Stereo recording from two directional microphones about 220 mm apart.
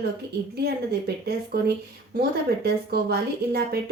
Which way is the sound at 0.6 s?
45° right (ahead or behind).